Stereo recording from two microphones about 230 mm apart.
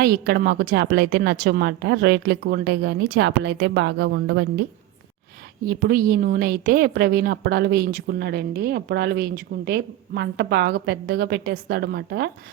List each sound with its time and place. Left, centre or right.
0.0 s a woman's voice: right
5.6 s a woman's voice: right